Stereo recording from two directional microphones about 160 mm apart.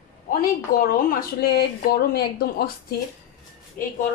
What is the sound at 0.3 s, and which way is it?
A woman's voice, 65° left (ahead or behind).